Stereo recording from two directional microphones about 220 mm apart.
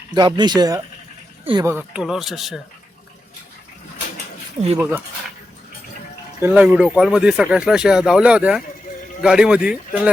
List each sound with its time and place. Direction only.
0.1 s speech: 20° right (ahead or behind)
1.7 s speech: 5° right (ahead or behind)
4.8 s speech: 10° right (ahead or behind)
6.4 s speech: 5° right (ahead or behind)